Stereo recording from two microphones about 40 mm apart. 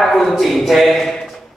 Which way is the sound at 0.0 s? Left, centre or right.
Centre.